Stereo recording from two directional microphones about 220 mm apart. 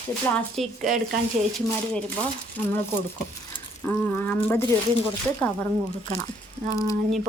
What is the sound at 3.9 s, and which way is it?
Speech, 10° left (ahead or behind).